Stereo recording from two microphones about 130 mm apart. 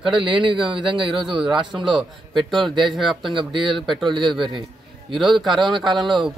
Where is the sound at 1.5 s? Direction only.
35° right (ahead or behind).